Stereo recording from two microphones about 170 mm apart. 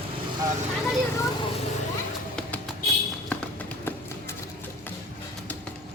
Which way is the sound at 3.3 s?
10° left (ahead or behind).